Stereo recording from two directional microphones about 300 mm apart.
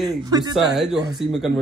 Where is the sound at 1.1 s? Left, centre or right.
Centre.